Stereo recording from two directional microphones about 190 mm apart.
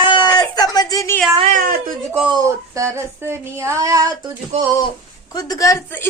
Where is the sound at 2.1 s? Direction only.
5° right (ahead or behind).